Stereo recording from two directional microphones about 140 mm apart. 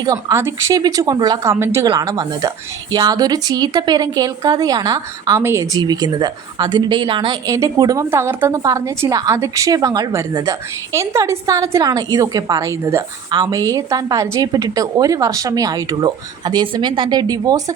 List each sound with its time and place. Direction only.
0.0 s a woman's voice: 25° right (ahead or behind)
7.4 s a woman's voice: 25° right (ahead or behind)